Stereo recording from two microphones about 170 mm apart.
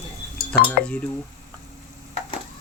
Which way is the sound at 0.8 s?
65° left (ahead or behind).